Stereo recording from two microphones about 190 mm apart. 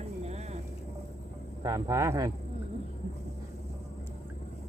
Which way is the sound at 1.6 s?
15° right (ahead or behind).